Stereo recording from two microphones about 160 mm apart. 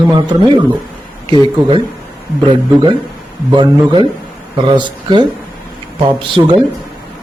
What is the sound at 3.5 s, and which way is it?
A woman's voice, 30° right (ahead or behind).